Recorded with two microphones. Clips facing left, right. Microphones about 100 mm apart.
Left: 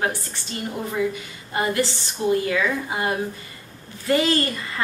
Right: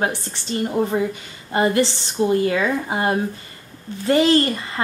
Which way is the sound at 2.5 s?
35° right (ahead or behind).